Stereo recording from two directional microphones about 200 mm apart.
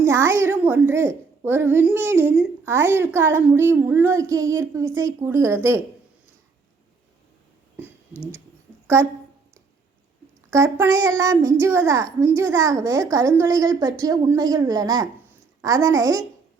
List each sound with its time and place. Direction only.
0.0 s a woman's voice: 10° right (ahead or behind)
8.1 s a sound: 10° left (ahead or behind)
10.5 s a woman's voice: 15° right (ahead or behind)